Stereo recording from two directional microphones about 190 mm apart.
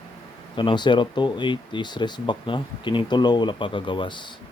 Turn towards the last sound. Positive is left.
turn(degrees=25)  # may be behind; listen again after turning